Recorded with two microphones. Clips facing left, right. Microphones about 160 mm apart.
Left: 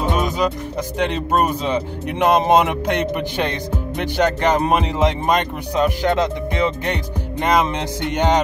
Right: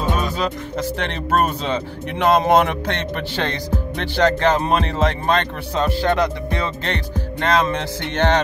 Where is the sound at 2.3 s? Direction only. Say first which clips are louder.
Even; 15° left (ahead or behind).